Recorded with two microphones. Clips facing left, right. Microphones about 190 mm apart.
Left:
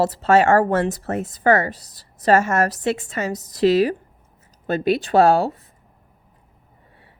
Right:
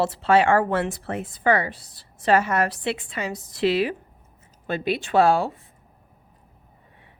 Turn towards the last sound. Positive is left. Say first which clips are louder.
# left 3 dB
turn(degrees=40)  # may be behind; listen again after turning